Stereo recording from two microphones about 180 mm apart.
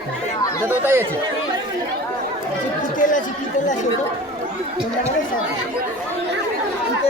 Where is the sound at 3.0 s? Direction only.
45° left (ahead or behind).